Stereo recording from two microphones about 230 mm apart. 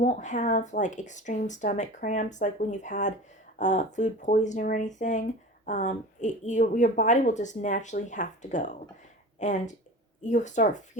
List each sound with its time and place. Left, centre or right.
0.0 s speech: left